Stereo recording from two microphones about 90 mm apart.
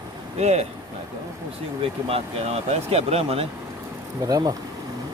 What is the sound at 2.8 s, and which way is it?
Speech, 90° right.